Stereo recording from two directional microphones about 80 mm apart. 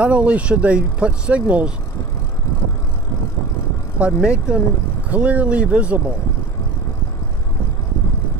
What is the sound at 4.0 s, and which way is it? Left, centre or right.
Speech, centre.